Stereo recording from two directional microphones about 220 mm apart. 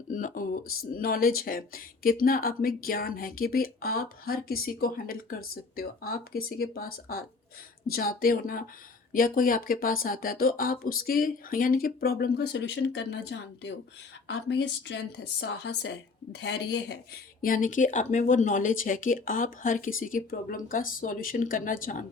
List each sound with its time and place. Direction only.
0.1 s a woman's voice: 35° left (ahead or behind)
17.4 s a woman's voice: 40° left (ahead or behind)